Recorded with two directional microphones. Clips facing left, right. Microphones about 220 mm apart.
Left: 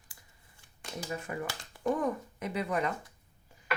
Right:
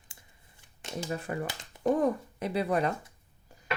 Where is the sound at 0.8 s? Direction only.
25° right (ahead or behind).